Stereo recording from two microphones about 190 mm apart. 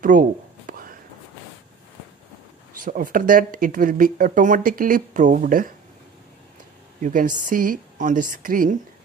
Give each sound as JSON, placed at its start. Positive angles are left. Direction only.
{"t": 0.0, "sound": "whispering", "side_deg": -45}
{"t": 2.8, "sound": "speech", "side_deg": -45}
{"t": 7.0, "sound": "speech", "side_deg": -45}